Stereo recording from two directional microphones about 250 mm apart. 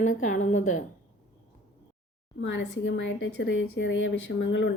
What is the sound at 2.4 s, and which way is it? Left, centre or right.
A woman's voice, left.